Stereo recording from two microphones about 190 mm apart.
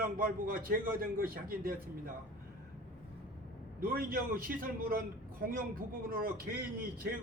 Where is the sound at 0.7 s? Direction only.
50° right (ahead or behind).